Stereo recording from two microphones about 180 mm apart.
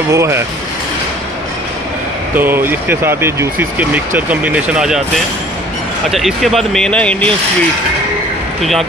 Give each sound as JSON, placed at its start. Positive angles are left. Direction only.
{"t": 0.1, "sound": "speech", "side_deg": -15}
{"t": 2.3, "sound": "speech", "side_deg": -10}
{"t": 6.0, "sound": "speech", "side_deg": 0}